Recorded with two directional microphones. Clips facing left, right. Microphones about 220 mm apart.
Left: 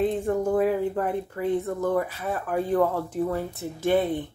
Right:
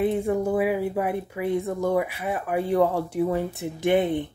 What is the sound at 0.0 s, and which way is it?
Speech, 10° right (ahead or behind).